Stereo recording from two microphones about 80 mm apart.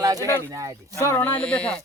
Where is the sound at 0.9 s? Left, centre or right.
Left.